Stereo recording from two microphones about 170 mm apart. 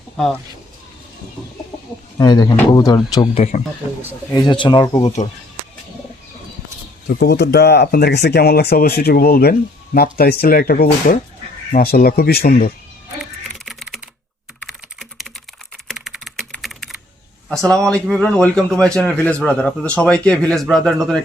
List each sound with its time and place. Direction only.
2.1 s speech: 25° left (ahead or behind)
3.3 s speech: 45° left (ahead or behind)
4.4 s speech: 25° left (ahead or behind)
7.2 s speech: 75° left (ahead or behind); by 12.7 s 60° left (ahead or behind)
13.7 s typing: centre (ahead or behind)
17.5 s a man's voice: 5° left (ahead or behind)